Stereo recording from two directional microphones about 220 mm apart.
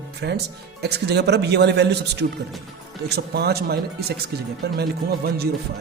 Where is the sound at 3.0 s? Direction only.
45° right (ahead or behind).